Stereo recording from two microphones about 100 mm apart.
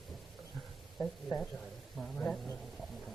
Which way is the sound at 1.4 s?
5° left (ahead or behind).